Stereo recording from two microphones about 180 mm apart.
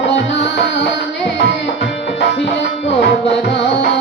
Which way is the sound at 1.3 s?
75° left (ahead or behind).